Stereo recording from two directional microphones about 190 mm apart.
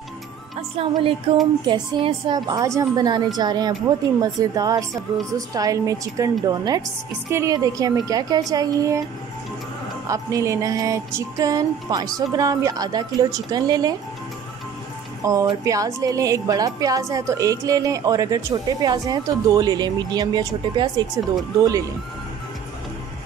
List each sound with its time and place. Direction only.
0.6 s a woman's voice: 30° right (ahead or behind)
5.5 s music: 20° right (ahead or behind)
6.4 s a woman's voice: 20° right (ahead or behind)
10.0 s music: 15° right (ahead or behind)
12.2 s a woman's voice: 20° right (ahead or behind)
15.2 s a woman's voice: 15° right (ahead or behind)
21.5 s music: 15° right (ahead or behind)